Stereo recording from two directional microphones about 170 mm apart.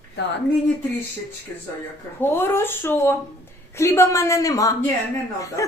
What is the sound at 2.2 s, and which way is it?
Speech, 15° left (ahead or behind).